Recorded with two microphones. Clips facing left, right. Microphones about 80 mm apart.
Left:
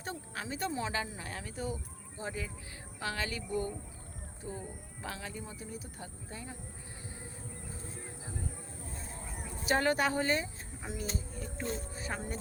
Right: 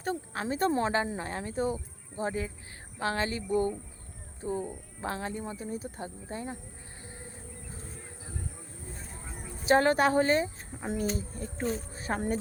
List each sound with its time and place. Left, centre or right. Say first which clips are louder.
0.0 s speech: right 8 dB; right
9.6 s speech: right 6 dB; right
12.1 s speech: right 10 dB; right